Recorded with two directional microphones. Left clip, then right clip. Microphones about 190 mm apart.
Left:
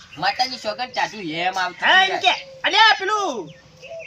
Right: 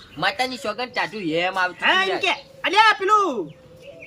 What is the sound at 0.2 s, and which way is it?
Speech, 35° right (ahead or behind).